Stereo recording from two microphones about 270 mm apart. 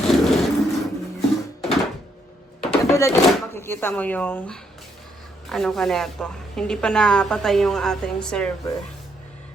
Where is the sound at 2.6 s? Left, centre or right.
Centre.